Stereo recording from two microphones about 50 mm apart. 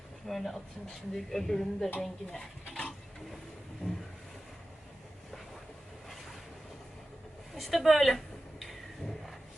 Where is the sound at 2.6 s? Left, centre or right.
Left.